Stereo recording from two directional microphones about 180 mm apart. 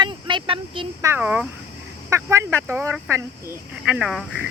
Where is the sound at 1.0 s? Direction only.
10° right (ahead or behind).